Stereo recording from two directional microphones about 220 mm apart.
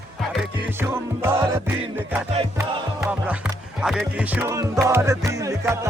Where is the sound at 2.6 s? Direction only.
5° right (ahead or behind).